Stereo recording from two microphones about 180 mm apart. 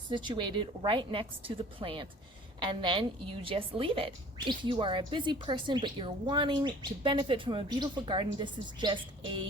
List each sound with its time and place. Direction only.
0.1 s a woman's voice: 25° right (ahead or behind)